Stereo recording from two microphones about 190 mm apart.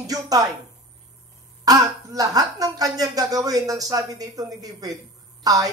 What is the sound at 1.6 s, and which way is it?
A woman's voice, 20° right (ahead or behind).